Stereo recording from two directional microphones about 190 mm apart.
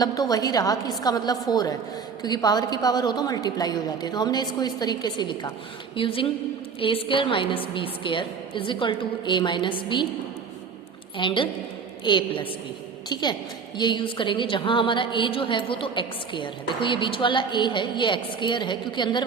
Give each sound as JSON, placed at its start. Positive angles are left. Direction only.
{"t": 0.0, "sound": "a woman's voice", "side_deg": 20}
{"t": 11.2, "sound": "a woman's voice", "side_deg": 25}